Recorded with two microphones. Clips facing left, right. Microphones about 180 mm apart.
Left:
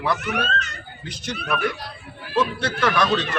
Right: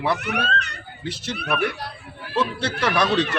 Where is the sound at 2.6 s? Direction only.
30° right (ahead or behind).